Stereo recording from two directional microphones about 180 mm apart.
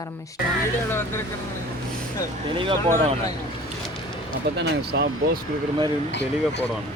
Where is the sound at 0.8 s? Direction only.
15° left (ahead or behind).